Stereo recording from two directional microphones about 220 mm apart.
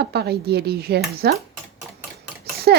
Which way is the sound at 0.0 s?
45° right (ahead or behind).